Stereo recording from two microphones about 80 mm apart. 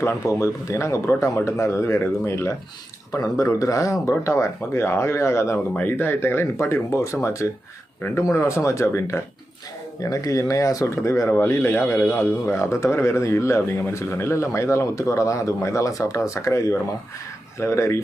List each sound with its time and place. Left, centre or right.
0.0 s a man's voice: left
10.0 s a man's voice: left